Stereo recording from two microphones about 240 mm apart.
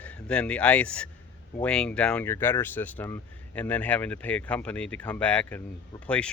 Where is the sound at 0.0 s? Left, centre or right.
Centre.